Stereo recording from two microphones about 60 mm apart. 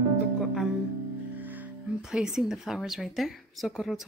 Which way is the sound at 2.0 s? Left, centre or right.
Centre.